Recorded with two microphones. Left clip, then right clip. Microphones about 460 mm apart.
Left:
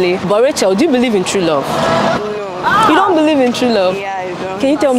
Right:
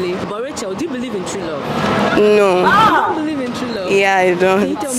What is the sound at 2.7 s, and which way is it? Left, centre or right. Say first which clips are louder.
Speech: left 6 dB; centre.